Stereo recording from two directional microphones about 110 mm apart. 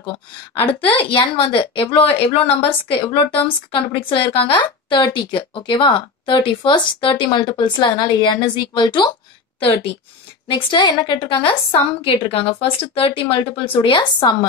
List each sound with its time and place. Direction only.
0.6 s a woman's voice: 55° left (ahead or behind)
3.3 s a woman's voice: 55° left (ahead or behind)
9.6 s a woman's voice: 55° left (ahead or behind)
12.0 s a woman's voice: 55° left (ahead or behind)